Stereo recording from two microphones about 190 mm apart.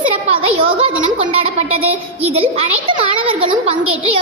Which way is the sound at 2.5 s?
30° right (ahead or behind).